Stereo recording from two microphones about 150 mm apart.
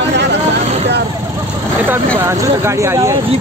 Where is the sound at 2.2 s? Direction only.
20° right (ahead or behind).